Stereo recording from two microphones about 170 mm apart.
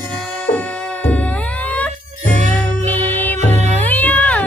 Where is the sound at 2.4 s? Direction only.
40° right (ahead or behind).